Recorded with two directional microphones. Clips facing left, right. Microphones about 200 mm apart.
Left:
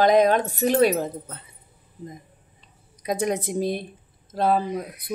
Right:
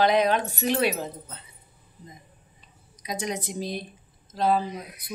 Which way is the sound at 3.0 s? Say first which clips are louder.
Left 7 dB; 55° left (ahead or behind).